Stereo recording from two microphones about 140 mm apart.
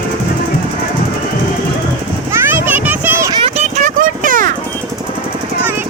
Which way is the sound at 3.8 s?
70° right (ahead or behind).